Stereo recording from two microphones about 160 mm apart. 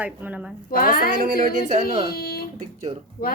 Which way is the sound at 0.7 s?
65° left (ahead or behind).